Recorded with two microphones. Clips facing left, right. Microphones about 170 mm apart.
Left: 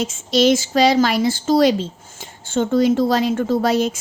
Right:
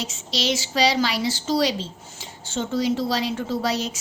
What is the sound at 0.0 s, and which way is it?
A woman's voice, 50° left (ahead or behind).